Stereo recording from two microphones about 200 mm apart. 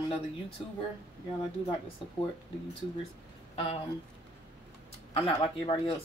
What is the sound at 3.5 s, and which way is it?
Speech, 30° left (ahead or behind).